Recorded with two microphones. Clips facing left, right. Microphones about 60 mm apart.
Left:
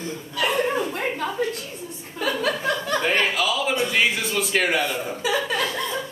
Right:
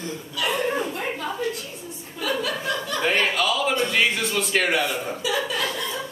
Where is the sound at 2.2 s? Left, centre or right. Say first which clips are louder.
Left 2 dB; left.